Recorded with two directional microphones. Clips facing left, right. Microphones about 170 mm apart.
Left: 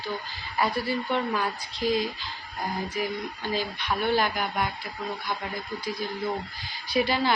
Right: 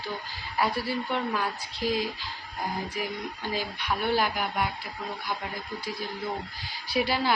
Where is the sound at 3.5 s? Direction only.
10° right (ahead or behind).